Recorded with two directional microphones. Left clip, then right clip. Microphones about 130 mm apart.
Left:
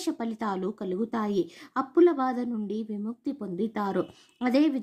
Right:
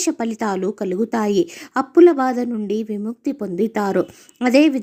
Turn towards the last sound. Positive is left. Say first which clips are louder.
# right 10 dB
turn(degrees=-25)  # may be behind; listen again after turning